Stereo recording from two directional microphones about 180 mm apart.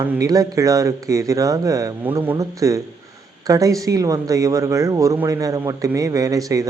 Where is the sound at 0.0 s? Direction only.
15° right (ahead or behind).